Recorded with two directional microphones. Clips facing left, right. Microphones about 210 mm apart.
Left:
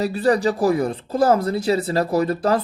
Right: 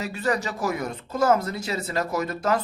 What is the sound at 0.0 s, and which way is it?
Speech, 35° left (ahead or behind).